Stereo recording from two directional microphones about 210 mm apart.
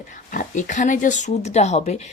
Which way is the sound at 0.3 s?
40° left (ahead or behind).